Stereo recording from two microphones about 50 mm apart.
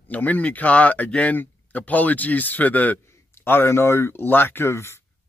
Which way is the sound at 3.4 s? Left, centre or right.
Left.